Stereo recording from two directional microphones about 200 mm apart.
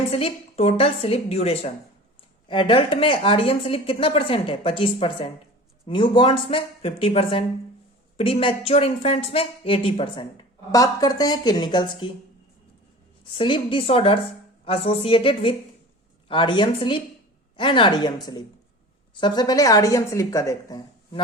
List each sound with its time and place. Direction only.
0.1 s a woman's voice: 30° left (ahead or behind)
13.3 s a woman's voice: 25° left (ahead or behind)
19.1 s a woman's voice: 20° left (ahead or behind)